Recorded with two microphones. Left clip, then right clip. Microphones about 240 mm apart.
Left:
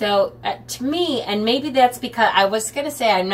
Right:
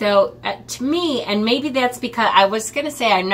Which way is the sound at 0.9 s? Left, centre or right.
Centre.